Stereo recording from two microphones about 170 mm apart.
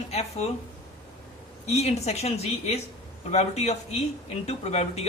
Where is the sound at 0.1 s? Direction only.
40° left (ahead or behind).